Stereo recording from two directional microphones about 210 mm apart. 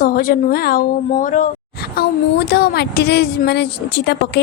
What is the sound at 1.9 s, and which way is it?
Speech, 50° left (ahead or behind).